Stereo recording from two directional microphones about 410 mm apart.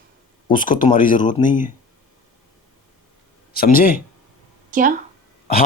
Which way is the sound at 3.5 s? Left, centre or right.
Left.